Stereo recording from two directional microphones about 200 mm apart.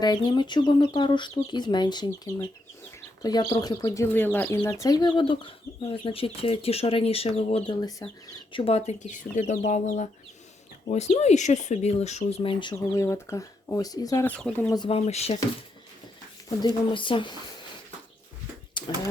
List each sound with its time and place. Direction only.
0.0 s speech: 20° left (ahead or behind)
7.8 s speech: 20° left (ahead or behind)
8.5 s speech: 30° left (ahead or behind)
12.7 s speech: 15° left (ahead or behind)
14.7 s speech: 25° left (ahead or behind)
16.6 s speech: 25° left (ahead or behind)
18.8 s a sound: 25° left (ahead or behind)